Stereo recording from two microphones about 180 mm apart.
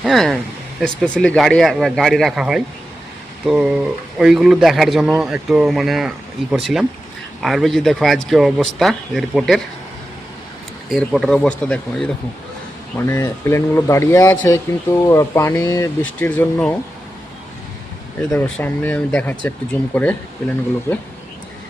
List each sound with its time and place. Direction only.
0.0 s speech: centre (ahead or behind)
10.8 s speech: centre (ahead or behind)
13.1 s speech: 15° left (ahead or behind)
18.3 s speech: 10° left (ahead or behind)